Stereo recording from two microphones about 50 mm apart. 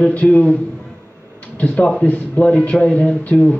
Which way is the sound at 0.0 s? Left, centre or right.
Left.